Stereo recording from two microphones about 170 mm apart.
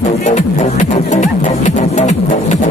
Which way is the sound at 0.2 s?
45° left (ahead or behind).